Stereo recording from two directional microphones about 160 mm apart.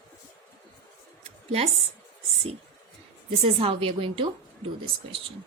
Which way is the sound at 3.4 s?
35° right (ahead or behind).